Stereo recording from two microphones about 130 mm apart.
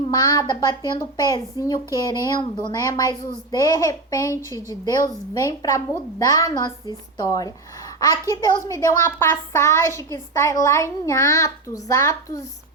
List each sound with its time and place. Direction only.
0.1 s a woman's voice: 30° left (ahead or behind)